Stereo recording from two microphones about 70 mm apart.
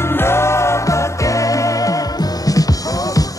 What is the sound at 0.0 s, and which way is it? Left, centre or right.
Music, left.